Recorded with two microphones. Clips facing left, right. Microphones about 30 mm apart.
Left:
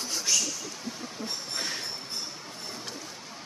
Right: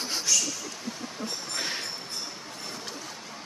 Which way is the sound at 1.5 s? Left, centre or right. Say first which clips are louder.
Right 2 dB; right.